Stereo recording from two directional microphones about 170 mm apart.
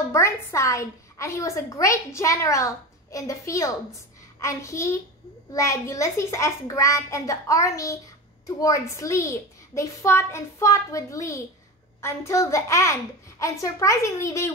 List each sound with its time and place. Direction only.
0.1 s a woman's voice: 15° left (ahead or behind)